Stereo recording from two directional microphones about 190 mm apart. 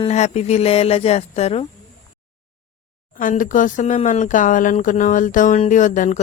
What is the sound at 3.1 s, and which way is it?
Speech, 45° left (ahead or behind).